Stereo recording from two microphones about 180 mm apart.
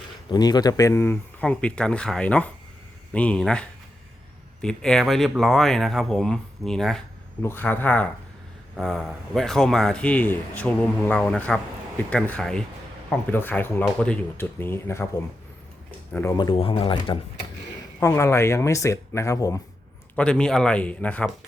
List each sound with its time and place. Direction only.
0.3 s a man's voice: 20° left (ahead or behind)
16.4 s speech: 30° left (ahead or behind)
18.0 s speech: 15° left (ahead or behind)
20.1 s speech: 5° left (ahead or behind)